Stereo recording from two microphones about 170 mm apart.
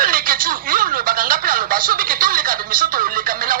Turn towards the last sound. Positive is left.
turn(degrees=-55)  # may be behind; listen again after turning